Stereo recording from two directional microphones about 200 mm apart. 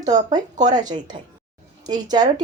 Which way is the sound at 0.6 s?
20° right (ahead or behind).